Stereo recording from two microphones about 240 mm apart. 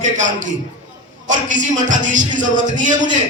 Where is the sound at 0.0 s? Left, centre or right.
Right.